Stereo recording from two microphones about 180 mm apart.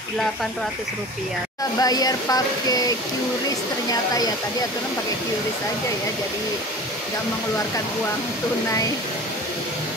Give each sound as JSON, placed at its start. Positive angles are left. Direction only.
{"t": 1.8, "sound": "speech", "side_deg": 20}
{"t": 3.9, "sound": "speech", "side_deg": 20}